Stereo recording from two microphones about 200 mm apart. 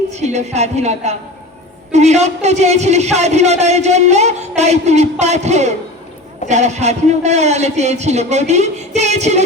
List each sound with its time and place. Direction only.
0.1 s a man's voice: 35° right (ahead or behind)